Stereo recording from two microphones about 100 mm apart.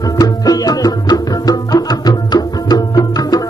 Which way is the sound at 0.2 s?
40° left (ahead or behind).